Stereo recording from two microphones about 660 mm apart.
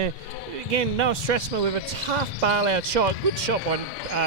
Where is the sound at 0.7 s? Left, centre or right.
Right.